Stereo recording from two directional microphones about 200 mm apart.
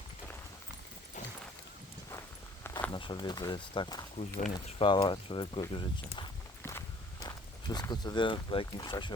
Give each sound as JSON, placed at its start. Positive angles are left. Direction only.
{"t": 2.9, "sound": "speech", "side_deg": 25}
{"t": 4.2, "sound": "speech", "side_deg": 40}
{"t": 4.5, "sound": "speech", "side_deg": 25}
{"t": 6.6, "sound": "walk", "side_deg": 10}
{"t": 7.2, "sound": "speech", "side_deg": 20}